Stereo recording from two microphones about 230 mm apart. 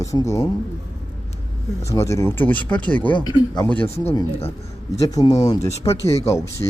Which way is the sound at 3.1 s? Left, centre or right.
Centre.